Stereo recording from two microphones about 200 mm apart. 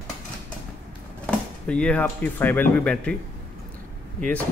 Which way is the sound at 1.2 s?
5° left (ahead or behind).